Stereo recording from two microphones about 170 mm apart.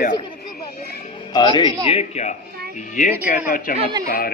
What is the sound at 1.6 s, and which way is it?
Speech, 20° right (ahead or behind).